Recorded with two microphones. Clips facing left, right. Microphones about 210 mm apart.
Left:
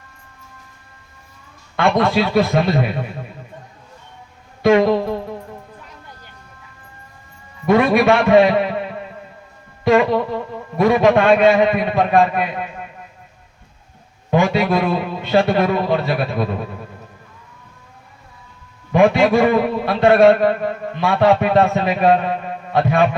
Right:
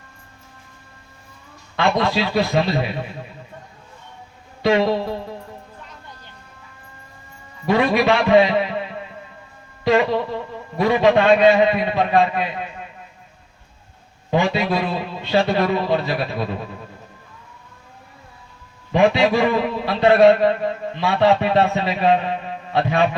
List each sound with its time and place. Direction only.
1.7 s a man's voice: 50° left (ahead or behind)
4.6 s a man's voice: 50° left (ahead or behind)
7.7 s a man's voice: 50° left (ahead or behind)
14.3 s a man's voice: 50° left (ahead or behind)
18.9 s a man's voice: 50° left (ahead or behind)